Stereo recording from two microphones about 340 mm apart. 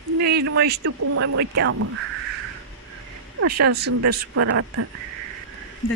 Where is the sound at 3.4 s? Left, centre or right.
Right.